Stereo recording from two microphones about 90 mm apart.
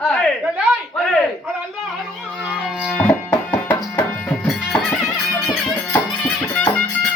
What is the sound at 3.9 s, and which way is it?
Music, 15° left (ahead or behind).